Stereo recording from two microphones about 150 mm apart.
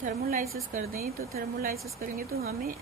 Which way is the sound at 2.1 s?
70° right (ahead or behind).